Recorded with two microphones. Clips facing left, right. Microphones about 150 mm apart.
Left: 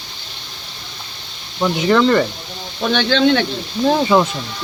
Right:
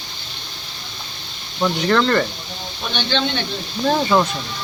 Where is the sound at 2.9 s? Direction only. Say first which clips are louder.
Left 8 dB; 90° left.